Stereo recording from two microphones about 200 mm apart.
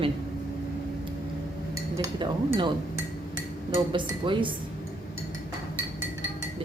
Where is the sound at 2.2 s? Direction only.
25° right (ahead or behind).